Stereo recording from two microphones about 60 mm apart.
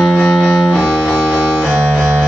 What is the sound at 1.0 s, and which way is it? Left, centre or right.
Music, centre.